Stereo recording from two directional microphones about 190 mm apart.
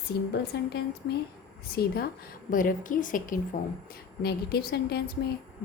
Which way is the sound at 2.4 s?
45° left (ahead or behind).